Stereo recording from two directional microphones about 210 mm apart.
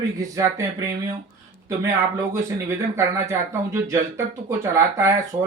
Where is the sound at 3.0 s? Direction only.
15° right (ahead or behind).